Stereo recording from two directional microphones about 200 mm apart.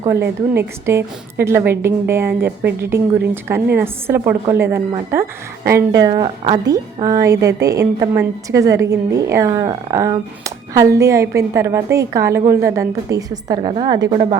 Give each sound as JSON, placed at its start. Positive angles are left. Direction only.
{"t": 0.0, "sound": "a woman's voice", "side_deg": -15}
{"t": 3.8, "sound": "a woman's voice", "side_deg": -10}